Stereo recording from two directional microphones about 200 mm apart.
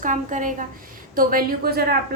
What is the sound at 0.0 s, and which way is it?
A woman's voice, 40° right (ahead or behind).